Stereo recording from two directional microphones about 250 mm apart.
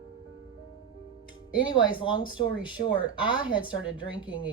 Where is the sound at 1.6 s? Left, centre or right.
Centre.